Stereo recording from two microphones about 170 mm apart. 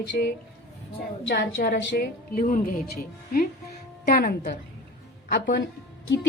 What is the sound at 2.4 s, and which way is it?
Speech, 55° left (ahead or behind).